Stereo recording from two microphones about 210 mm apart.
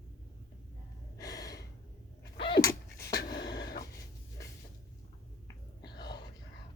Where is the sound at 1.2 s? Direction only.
15° left (ahead or behind).